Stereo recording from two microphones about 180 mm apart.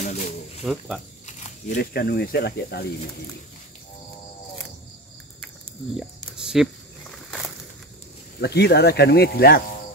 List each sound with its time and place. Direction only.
0.0 s snake: 45° left (ahead or behind)
0.7 s speech: centre (ahead or behind)
1.2 s a sound: 40° left (ahead or behind)
1.8 s speech: 60° left (ahead or behind)
5.9 s walk: 5° right (ahead or behind)
8.4 s speech: 65° left (ahead or behind)